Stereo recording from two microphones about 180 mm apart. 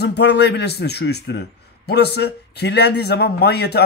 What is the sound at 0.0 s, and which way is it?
Speech, 70° left (ahead or behind).